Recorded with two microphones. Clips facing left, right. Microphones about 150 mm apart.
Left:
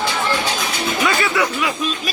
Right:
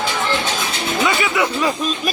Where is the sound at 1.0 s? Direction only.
20° right (ahead or behind).